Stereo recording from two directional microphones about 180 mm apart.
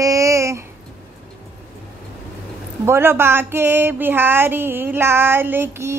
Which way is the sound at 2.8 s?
15° right (ahead or behind).